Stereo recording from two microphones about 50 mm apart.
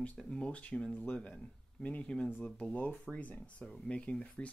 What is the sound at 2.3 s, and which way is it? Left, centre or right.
Speech, left.